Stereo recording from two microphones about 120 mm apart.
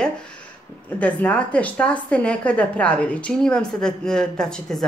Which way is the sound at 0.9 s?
10° left (ahead or behind).